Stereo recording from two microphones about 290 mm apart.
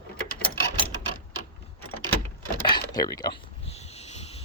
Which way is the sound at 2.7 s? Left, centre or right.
Centre.